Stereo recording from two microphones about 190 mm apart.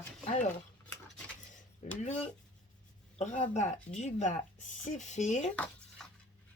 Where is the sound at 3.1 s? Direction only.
35° left (ahead or behind).